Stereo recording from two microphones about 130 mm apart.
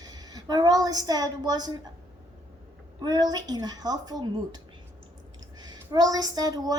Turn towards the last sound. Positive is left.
turn(degrees=-30)  # may be behind; listen again after turning